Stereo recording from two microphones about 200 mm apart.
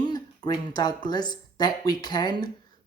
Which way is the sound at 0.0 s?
20° left (ahead or behind).